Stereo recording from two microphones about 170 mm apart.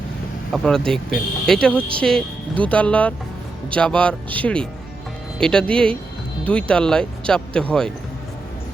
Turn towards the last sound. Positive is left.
turn(degrees=5)  # may be behind; listen again after turning